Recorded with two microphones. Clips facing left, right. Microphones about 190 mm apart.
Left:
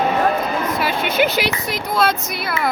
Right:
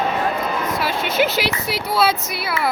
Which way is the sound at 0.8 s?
Centre (ahead or behind).